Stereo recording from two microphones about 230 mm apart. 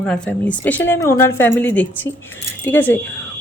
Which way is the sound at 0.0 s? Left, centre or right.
Centre.